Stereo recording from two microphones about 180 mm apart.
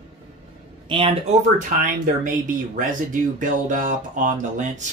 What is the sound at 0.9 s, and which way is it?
Speech, 30° right (ahead or behind).